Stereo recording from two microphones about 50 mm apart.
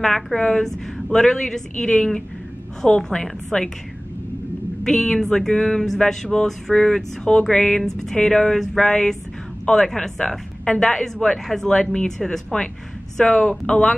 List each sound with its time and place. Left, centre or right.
0.0 s speech: centre
4.8 s speech: centre